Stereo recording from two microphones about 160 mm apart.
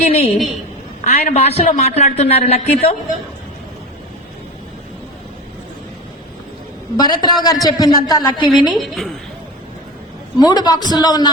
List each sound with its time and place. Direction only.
0.0 s a woman's voice: 40° left (ahead or behind)
6.9 s a man's voice: 25° left (ahead or behind)
8.7 s a woman's voice: centre (ahead or behind)
10.3 s a man's voice: 25° left (ahead or behind)